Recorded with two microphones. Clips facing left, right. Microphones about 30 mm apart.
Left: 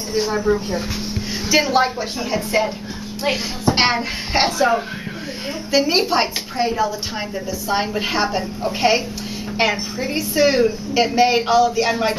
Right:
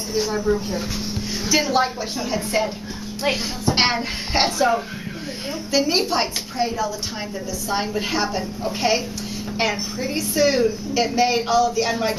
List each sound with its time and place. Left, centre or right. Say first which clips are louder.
0.1 s a woman's voice: left 3 dB; centre
3.7 s a woman's voice: left 1 dB; centre